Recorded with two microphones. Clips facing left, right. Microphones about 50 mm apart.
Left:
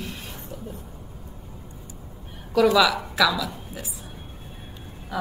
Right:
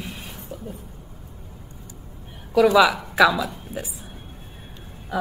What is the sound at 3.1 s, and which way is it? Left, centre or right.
Speech, right.